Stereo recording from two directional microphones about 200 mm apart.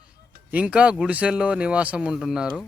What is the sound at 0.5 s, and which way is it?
Speech, 5° right (ahead or behind).